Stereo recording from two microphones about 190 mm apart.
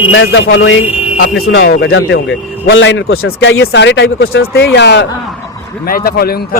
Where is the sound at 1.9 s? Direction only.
75° left (ahead or behind); by 3.3 s 90° left.